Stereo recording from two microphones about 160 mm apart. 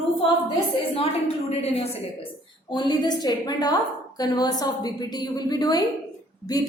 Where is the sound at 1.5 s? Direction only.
40° left (ahead or behind).